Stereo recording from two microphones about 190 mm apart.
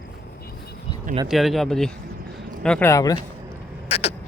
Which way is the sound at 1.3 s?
Centre (ahead or behind).